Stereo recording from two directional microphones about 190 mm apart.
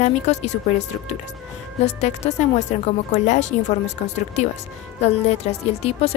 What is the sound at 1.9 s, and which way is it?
A woman's voice, 35° left (ahead or behind).